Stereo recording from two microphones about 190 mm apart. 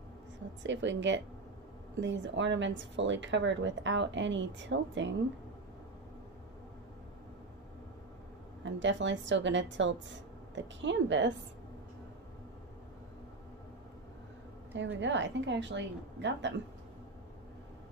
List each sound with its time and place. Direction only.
0.7 s speech: 75° right (ahead or behind)
8.6 s speech: 75° right (ahead or behind)
15.0 s speech: 70° right (ahead or behind)